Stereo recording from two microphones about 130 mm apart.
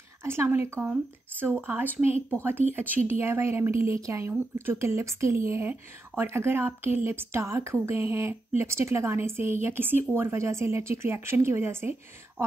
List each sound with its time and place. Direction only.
0.2 s speech: 20° right (ahead or behind)